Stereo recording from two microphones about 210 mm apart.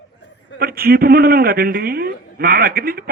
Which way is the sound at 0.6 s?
45° right (ahead or behind).